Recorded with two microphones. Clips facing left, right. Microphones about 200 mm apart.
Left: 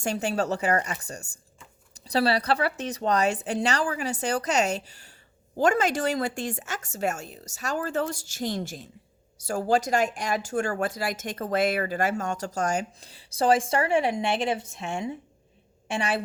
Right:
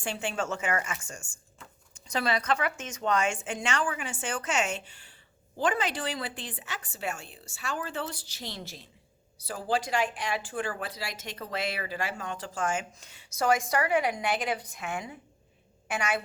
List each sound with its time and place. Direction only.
0.0 s speech: 40° left (ahead or behind)